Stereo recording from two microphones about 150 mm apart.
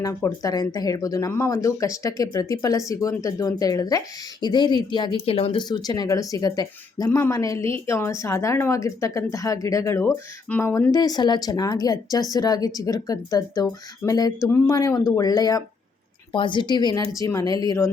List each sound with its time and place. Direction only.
0.0 s speech: 20° left (ahead or behind)
10.9 s a woman's voice: 25° left (ahead or behind)